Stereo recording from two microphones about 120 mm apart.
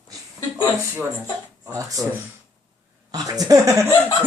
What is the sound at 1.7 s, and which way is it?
Speech, 30° right (ahead or behind).